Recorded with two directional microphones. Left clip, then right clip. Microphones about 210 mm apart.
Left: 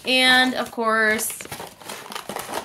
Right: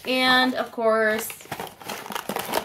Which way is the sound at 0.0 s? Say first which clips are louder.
Left 3 dB; 40° left (ahead or behind).